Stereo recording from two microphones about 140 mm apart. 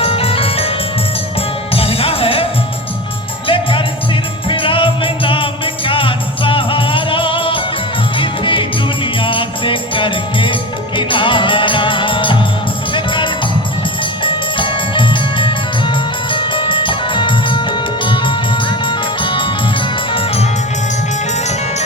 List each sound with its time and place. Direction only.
0.0 s music: 45° left (ahead or behind)